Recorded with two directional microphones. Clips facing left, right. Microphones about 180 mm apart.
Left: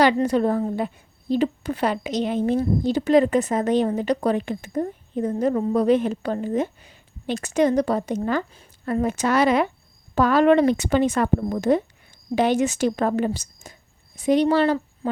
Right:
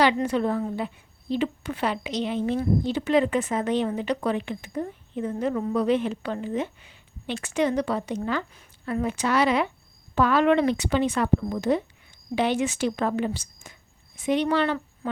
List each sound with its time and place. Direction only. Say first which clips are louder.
0.0 s a woman's voice: left 4 dB; 40° left (ahead or behind)